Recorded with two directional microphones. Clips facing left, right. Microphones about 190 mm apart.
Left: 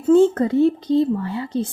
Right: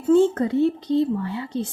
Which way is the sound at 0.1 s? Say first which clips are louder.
Left 3 dB; 45° left (ahead or behind).